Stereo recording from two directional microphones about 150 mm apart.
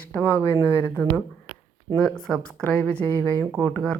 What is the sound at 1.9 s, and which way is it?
Speech, 5° left (ahead or behind).